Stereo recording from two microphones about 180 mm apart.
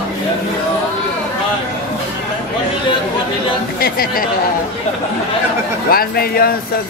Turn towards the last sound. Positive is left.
turn(degrees=55)  # may be behind; listen again after turning